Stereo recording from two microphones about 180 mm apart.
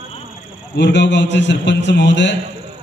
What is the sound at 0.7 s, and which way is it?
A man's voice, 70° left (ahead or behind).